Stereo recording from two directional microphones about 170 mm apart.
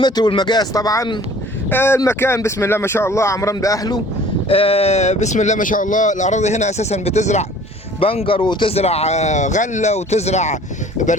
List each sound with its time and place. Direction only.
0.0 s speech: 25° left (ahead or behind)
4.4 s speech: 35° left (ahead or behind)